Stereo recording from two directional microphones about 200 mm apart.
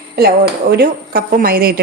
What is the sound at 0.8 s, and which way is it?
A woman's voice, 45° right (ahead or behind).